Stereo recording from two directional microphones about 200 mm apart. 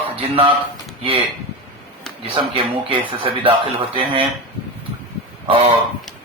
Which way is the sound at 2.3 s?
25° right (ahead or behind).